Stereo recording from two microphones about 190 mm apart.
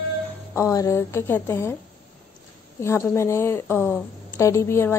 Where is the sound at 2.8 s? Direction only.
15° left (ahead or behind).